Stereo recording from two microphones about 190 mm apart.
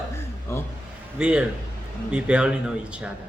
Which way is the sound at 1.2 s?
5° right (ahead or behind).